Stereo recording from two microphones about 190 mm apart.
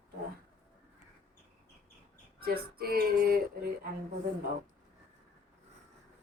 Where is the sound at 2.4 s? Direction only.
55° right (ahead or behind).